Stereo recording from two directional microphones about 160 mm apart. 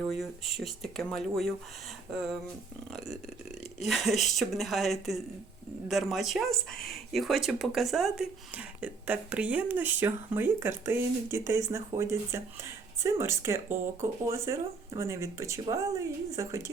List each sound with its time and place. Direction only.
0.0 s speech: centre (ahead or behind)
3.8 s speech: centre (ahead or behind); by 16.7 s 20° right (ahead or behind)